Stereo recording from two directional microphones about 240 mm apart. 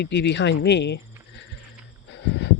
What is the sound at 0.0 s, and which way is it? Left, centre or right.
Speech, left.